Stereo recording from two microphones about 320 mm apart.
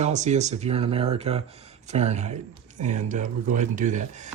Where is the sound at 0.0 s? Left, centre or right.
Right.